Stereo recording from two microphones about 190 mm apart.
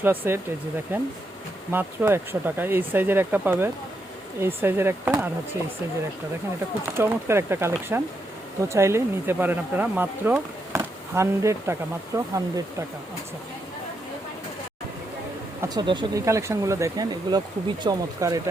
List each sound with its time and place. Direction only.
0.0 s speech: 10° right (ahead or behind)
6.9 s speech: 15° right (ahead or behind)
15.6 s speech: 20° right (ahead or behind)